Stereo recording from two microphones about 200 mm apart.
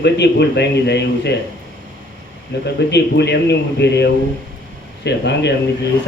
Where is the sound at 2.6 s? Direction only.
60° left (ahead or behind).